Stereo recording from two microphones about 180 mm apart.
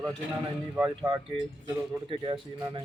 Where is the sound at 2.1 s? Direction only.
25° right (ahead or behind).